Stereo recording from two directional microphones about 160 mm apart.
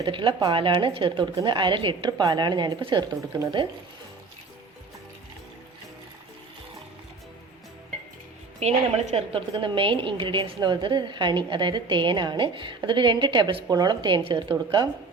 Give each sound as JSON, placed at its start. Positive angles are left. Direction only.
{"t": 0.0, "sound": "a woman's voice", "side_deg": -30}
{"t": 8.5, "sound": "a woman's voice", "side_deg": -45}